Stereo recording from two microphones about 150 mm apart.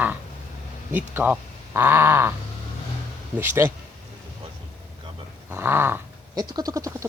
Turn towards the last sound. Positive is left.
turn(degrees=-20)  # may be behind; listen again after turning